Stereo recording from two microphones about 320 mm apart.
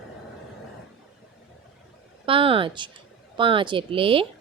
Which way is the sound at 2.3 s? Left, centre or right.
Centre.